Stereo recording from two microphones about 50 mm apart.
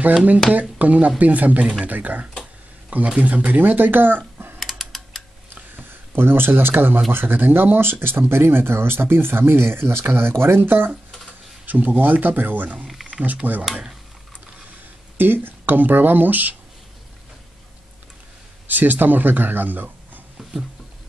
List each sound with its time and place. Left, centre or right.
0.5 s speech: right
4.6 s typing: centre
5.5 s a sound: right
7.1 s speech: right
11.6 s speech: right
15.1 s speech: right
18.7 s speech: right